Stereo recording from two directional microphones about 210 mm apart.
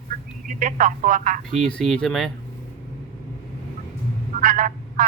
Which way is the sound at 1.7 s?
5° left (ahead or behind).